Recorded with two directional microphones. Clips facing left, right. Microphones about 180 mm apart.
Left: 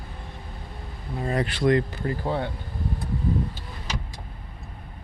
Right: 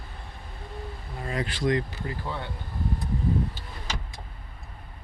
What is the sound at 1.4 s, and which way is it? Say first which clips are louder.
Speech: left 4 dB; 60° left (ahead or behind).